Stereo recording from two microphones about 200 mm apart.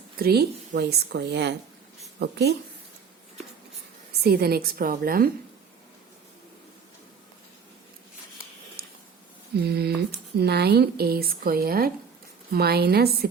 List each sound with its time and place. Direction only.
0.2 s speech: 50° right (ahead or behind)
4.2 s speech: 50° right (ahead or behind)
8.8 s a sound: 50° right (ahead or behind)
9.6 s speech: 55° right (ahead or behind)